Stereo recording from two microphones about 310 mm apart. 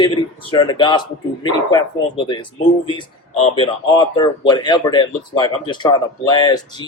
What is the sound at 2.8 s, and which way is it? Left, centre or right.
Speech, centre.